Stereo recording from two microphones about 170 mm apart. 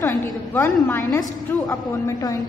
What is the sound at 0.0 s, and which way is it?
A woman's voice, 15° left (ahead or behind).